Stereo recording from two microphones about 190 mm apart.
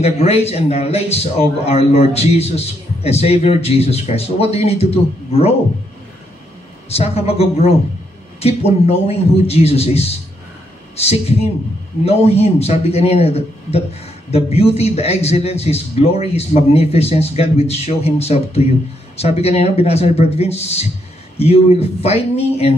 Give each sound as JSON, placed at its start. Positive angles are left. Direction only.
{"t": 0.0, "sound": "a man's voice", "side_deg": 35}
{"t": 6.9, "sound": "a man's voice", "side_deg": 30}